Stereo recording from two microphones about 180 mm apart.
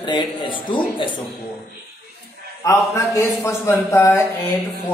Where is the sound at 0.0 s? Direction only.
25° left (ahead or behind).